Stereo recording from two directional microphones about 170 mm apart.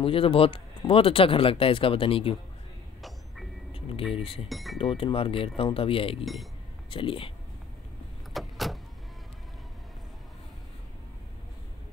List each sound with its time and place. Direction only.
0.0 s speech: 30° left (ahead or behind)
4.1 s speech: 35° left (ahead or behind)
4.5 s speech: centre (ahead or behind)
4.7 s speech: 35° left (ahead or behind)
6.2 s speech: centre (ahead or behind)
6.9 s speech: 30° left (ahead or behind)
8.3 s vehicle: centre (ahead or behind)